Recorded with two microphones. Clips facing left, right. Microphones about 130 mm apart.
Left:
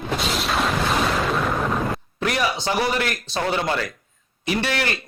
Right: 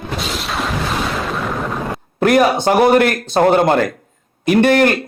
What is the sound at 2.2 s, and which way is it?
A man's voice, 50° right (ahead or behind).